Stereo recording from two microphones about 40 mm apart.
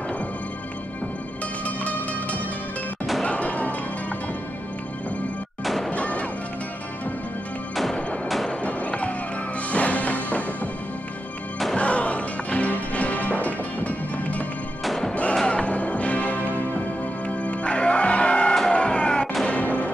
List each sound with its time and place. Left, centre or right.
3.3 s music: left
5.9 s music: left
7.7 s music: centre
8.6 s music: left
11.7 s music: left
14.9 s music: centre
15.4 s music: left
17.5 s music: left
19.4 s music: left